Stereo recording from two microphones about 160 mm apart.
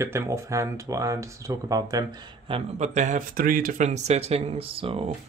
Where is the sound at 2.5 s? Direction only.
45° right (ahead or behind).